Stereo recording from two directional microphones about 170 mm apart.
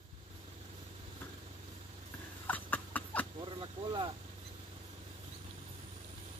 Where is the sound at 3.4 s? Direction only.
30° right (ahead or behind).